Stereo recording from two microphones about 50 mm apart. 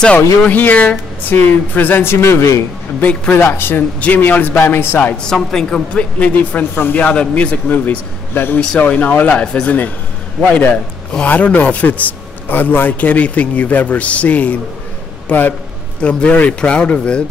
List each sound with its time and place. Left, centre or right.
0.5 s a man's voice: left
2.1 s a man's voice: left
3.0 s a man's voice: left
3.3 s speech: left
4.0 s a man's voice: left
5.2 s a woman's voice: centre
5.9 s a man's voice: left
6.7 s speech: left
7.2 s speech: left
7.7 s a man's voice: left
10.5 s a man's voice: left
16.0 s speech: left